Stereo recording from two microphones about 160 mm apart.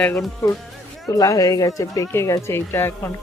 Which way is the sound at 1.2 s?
20° left (ahead or behind).